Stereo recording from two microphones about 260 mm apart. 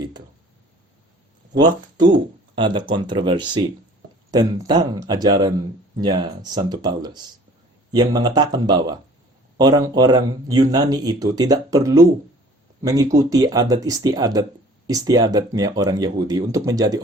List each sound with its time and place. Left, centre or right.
1.5 s speech: centre